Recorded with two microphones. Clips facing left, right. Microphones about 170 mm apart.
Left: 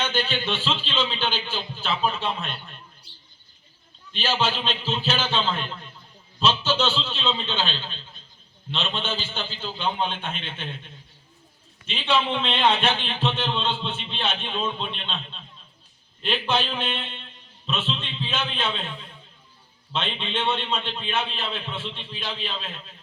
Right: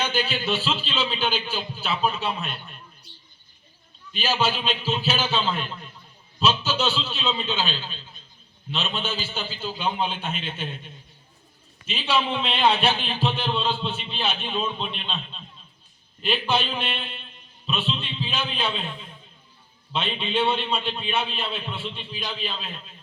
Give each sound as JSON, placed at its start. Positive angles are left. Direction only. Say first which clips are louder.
{"t": 0.0, "sound": "a man's voice", "louder": "even", "side_deg": -10}
{"t": 4.1, "sound": "a man's voice", "louder": "right 1 dB", "side_deg": -10}
{"t": 11.9, "sound": "a man's voice", "louder": "left 1 dB", "side_deg": -5}
{"t": 19.9, "sound": "a man's voice", "louder": "right 2 dB", "side_deg": -10}